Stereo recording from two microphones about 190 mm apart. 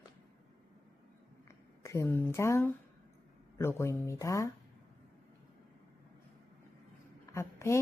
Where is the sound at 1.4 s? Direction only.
15° left (ahead or behind).